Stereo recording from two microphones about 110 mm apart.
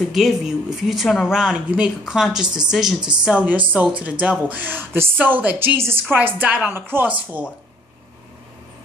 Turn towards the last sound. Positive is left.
turn(degrees=-15)  # may be behind; listen again after turning